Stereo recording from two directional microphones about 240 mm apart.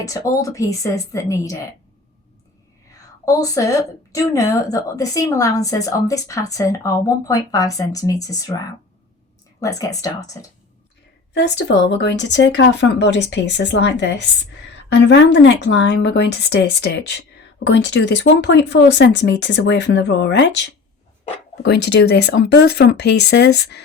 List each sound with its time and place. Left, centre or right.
0.0 s a woman's voice: centre
3.2 s a woman's voice: centre
11.3 s a woman's voice: left